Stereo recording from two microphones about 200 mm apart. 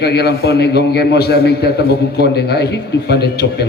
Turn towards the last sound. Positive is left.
turn(degrees=55)  # may be behind; listen again after turning